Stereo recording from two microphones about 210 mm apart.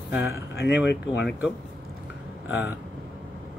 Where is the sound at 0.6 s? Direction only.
55° left (ahead or behind).